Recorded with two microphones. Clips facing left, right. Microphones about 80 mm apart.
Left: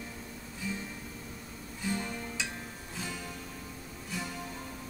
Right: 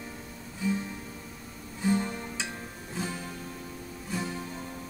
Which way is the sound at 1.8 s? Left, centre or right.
Right.